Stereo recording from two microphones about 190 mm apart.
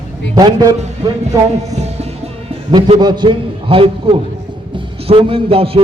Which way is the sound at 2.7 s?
25° right (ahead or behind).